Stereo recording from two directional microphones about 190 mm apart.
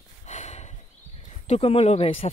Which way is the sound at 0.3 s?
35° left (ahead or behind).